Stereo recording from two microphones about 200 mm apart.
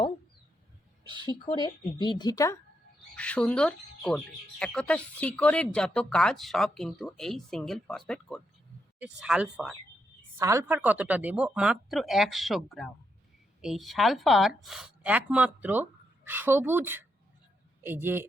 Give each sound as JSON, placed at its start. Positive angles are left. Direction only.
{"t": 1.5, "sound": "speech", "side_deg": 25}
{"t": 3.2, "sound": "speech", "side_deg": 5}
{"t": 10.3, "sound": "a woman's voice", "side_deg": -15}